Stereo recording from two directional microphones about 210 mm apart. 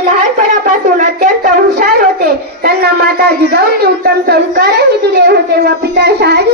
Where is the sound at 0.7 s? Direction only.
35° right (ahead or behind).